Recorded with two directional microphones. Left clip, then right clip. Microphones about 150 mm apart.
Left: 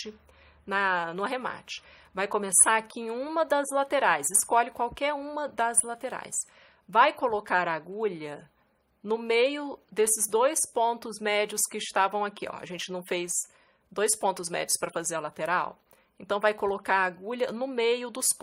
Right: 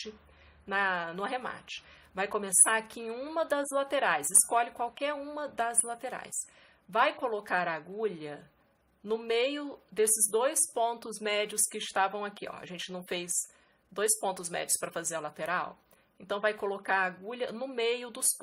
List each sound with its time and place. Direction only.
0.7 s a woman's voice: 30° left (ahead or behind)